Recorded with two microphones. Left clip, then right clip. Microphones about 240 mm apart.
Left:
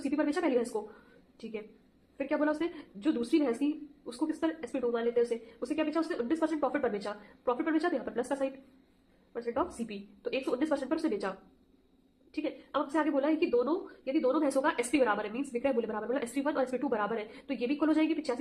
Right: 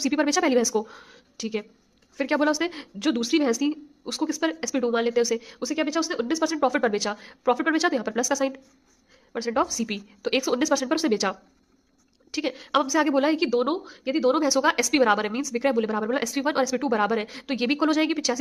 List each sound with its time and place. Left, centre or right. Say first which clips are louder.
0.0 s a woman's voice: right 8 dB; right
2.1 s a woman's voice: right 8 dB; right